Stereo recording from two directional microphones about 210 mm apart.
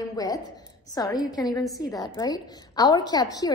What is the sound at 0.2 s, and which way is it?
A woman's voice, 15° left (ahead or behind).